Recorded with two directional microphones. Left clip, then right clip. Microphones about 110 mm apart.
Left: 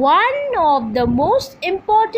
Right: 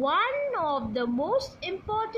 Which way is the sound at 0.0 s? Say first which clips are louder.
Left 11 dB; 45° left (ahead or behind).